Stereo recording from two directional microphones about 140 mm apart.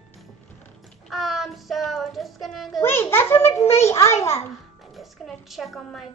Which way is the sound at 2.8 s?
15° left (ahead or behind).